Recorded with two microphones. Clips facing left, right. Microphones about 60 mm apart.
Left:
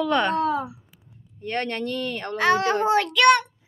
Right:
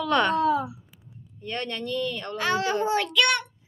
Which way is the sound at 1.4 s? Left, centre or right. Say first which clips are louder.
Left 5 dB; left.